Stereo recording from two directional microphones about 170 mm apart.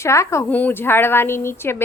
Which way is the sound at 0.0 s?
15° left (ahead or behind).